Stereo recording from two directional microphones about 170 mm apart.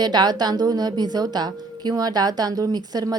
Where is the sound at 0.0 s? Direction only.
25° right (ahead or behind).